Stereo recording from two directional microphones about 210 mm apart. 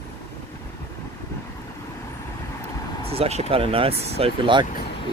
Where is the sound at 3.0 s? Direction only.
30° right (ahead or behind).